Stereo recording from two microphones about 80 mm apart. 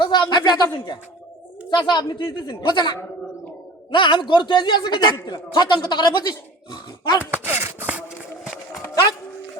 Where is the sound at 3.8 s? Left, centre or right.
Left.